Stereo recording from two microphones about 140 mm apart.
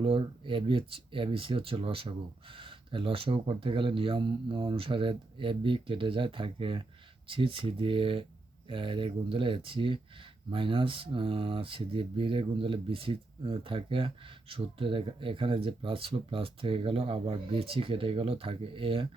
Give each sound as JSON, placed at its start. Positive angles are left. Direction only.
{"t": 0.0, "sound": "speech", "side_deg": -40}